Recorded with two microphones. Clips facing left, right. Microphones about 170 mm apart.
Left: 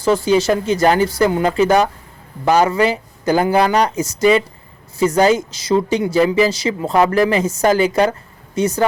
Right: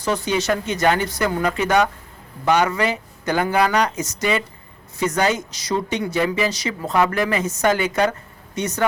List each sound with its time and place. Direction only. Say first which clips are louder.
0.0 s speech: left 7 dB; 30° left (ahead or behind)